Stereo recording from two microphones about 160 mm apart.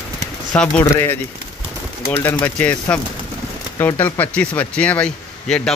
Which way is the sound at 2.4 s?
10° left (ahead or behind).